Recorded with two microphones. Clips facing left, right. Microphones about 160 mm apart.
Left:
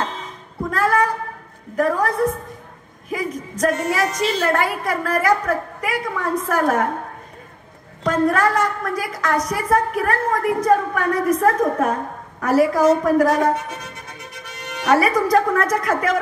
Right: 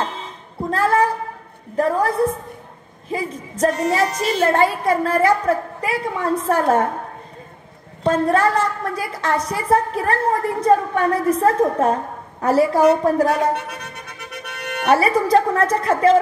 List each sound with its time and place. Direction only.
0.7 s a sound: 30° right (ahead or behind)
1.8 s a woman's voice: 30° right (ahead or behind)
8.0 s a woman's voice: 30° right (ahead or behind)
13.3 s music: 65° right (ahead or behind)
14.9 s a woman's voice: 30° right (ahead or behind)